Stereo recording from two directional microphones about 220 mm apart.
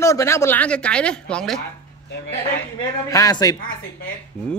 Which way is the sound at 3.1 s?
15° left (ahead or behind).